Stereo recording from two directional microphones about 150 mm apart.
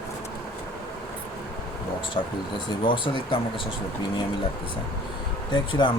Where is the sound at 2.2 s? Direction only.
35° left (ahead or behind).